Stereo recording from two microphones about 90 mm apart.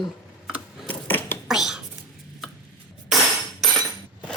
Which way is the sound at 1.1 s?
20° left (ahead or behind).